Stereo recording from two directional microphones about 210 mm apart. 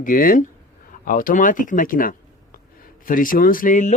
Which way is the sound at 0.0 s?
40° left (ahead or behind).